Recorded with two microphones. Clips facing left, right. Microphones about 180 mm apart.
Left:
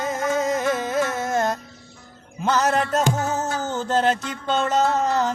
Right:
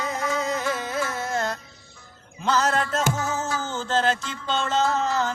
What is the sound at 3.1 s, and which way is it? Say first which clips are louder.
Music: left 3 dB; 40° left (ahead or behind).